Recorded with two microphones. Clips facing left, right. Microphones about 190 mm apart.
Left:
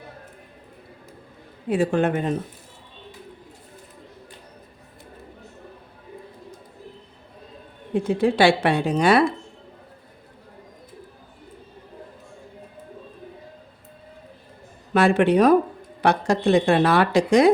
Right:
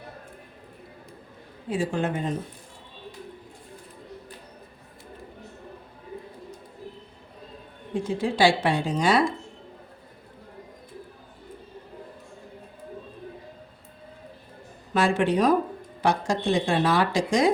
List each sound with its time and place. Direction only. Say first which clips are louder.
1.7 s speech: left 6 dB; 60° left (ahead or behind)
7.9 s speech: left 5 dB; 60° left (ahead or behind)
14.9 s speech: left 5 dB; 60° left (ahead or behind)